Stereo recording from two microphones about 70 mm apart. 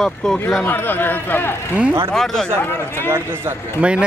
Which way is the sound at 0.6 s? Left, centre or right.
Left.